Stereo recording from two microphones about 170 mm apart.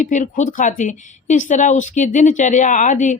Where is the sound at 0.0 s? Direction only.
45° left (ahead or behind).